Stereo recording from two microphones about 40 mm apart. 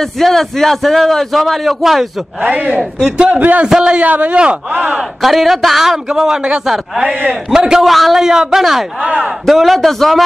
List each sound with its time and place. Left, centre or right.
0.0 s a man's voice: centre
2.5 s a man's voice: right
3.3 s a man's voice: right
4.4 s speech: right
5.2 s a man's voice: centre
7.8 s a man's voice: centre
8.2 s a man's voice: centre
9.0 s a man's voice: right
9.5 s a man's voice: centre